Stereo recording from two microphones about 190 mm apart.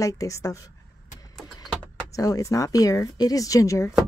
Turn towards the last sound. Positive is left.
turn(degrees=15)  # may be behind; listen again after turning